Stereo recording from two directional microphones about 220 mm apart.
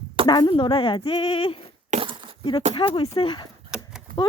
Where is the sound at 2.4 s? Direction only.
25° left (ahead or behind).